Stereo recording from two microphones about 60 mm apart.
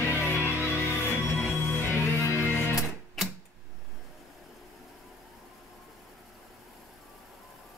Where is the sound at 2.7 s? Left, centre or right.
Centre.